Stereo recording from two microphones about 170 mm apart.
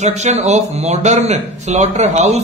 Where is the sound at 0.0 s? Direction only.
40° right (ahead or behind).